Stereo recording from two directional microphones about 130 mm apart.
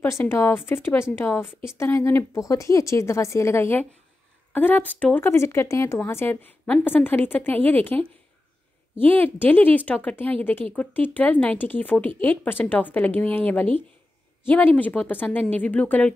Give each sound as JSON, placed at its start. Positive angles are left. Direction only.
{"t": 0.0, "sound": "a woman's voice", "side_deg": 20}